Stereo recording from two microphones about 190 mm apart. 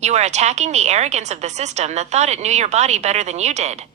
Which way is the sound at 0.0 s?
35° right (ahead or behind).